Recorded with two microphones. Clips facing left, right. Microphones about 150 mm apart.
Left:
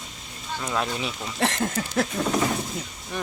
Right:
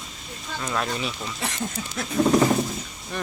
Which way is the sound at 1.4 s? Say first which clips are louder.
Left 7 dB; 80° left.